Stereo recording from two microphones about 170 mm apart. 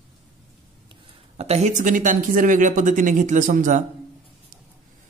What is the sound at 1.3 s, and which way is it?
A man's voice, 40° right (ahead or behind).